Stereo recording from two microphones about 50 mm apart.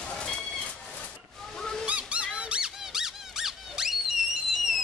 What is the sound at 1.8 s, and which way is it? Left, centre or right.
Honk, right.